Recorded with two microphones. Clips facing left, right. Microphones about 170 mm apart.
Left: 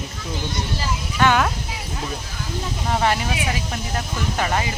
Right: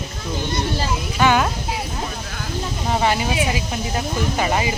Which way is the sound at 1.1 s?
5° right (ahead or behind).